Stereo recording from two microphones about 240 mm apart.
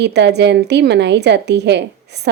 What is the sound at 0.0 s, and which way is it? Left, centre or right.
A woman's voice, right.